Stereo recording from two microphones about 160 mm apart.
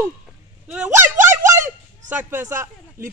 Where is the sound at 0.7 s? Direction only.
10° right (ahead or behind).